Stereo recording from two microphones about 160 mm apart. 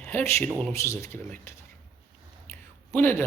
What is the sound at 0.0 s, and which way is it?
Speech, 15° left (ahead or behind).